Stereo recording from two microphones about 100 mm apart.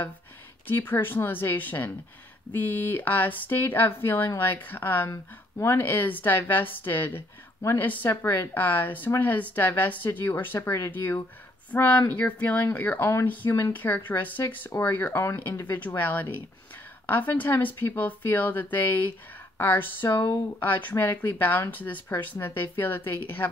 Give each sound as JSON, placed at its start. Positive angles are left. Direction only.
{"t": 0.7, "sound": "a woman's voice", "side_deg": 25}
{"t": 13.7, "sound": "a woman's voice", "side_deg": 20}